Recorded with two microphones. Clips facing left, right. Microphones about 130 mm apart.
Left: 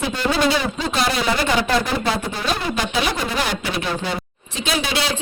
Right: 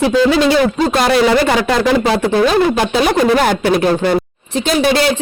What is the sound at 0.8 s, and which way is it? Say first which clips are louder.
Speech: right 9 dB; 50° right (ahead or behind).